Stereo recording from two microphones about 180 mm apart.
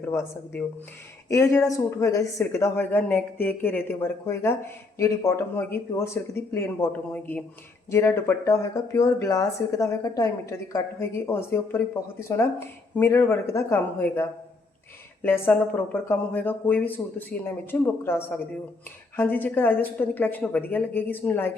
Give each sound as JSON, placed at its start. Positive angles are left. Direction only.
{"t": 0.0, "sound": "speech", "side_deg": 15}